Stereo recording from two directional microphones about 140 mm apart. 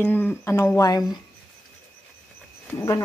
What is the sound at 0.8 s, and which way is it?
Speech, 25° left (ahead or behind).